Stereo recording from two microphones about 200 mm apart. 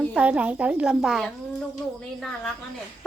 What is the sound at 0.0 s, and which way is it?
A child's voice, 5° right (ahead or behind).